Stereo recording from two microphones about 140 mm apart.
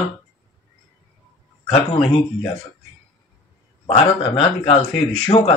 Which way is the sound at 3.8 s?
40° left (ahead or behind).